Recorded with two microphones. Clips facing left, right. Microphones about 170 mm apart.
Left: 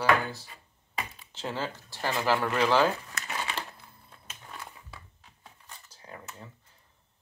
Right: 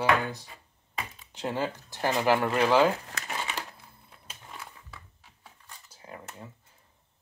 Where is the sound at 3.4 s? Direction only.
10° right (ahead or behind).